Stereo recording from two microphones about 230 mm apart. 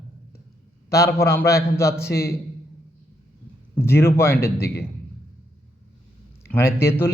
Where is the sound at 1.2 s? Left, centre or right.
Centre.